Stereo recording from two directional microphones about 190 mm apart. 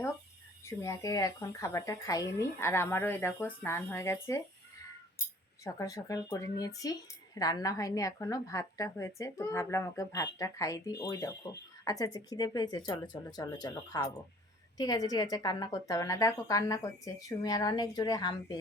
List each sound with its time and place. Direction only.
0.6 s a woman's voice: 15° left (ahead or behind)
5.6 s a woman's voice: 20° left (ahead or behind)